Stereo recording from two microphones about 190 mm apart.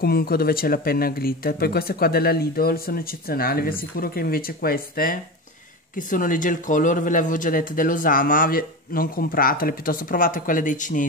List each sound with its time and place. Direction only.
0.0 s speech: 55° left (ahead or behind)